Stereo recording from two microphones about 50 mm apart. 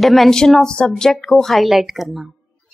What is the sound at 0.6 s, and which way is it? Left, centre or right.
A woman's voice, centre.